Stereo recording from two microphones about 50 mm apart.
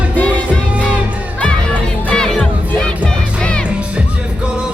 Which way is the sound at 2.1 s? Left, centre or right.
Centre.